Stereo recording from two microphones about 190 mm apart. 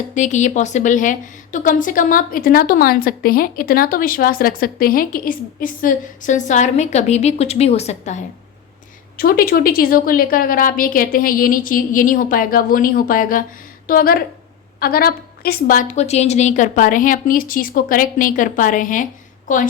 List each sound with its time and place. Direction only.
0.1 s a woman's voice: 40° left (ahead or behind)
9.1 s a woman's voice: 50° left (ahead or behind)